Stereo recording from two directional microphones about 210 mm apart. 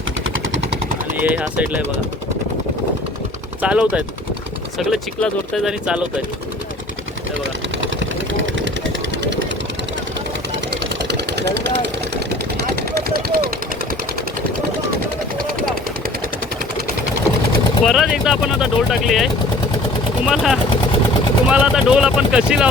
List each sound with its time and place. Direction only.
1.2 s speech: 5° right (ahead or behind)
3.6 s speech: 5° right (ahead or behind)
8.3 s vehicle: 60° right (ahead or behind)
10.7 s engine: 55° right (ahead or behind)
17.8 s speech: centre (ahead or behind)